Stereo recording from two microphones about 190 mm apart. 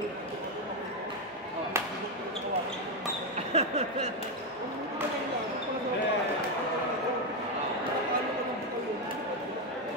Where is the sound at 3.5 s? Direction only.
35° right (ahead or behind).